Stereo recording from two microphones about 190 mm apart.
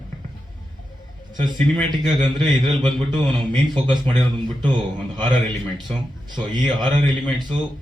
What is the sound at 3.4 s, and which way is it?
A man's voice, 25° right (ahead or behind).